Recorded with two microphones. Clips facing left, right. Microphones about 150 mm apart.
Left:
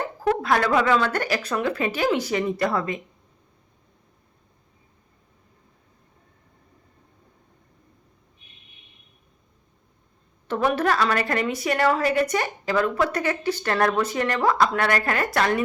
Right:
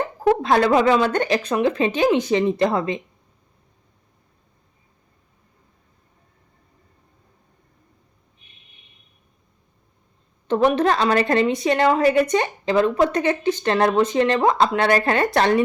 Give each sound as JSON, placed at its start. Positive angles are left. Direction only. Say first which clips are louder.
{"t": 0.3, "sound": "a woman's voice", "louder": "right 5 dB", "side_deg": -25}
{"t": 10.5, "sound": "a woman's voice", "louder": "right 4 dB", "side_deg": -20}